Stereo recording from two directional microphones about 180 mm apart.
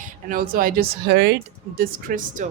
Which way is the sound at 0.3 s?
55° right (ahead or behind).